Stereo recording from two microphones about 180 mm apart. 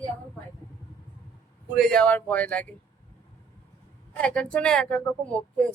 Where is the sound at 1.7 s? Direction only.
5° left (ahead or behind).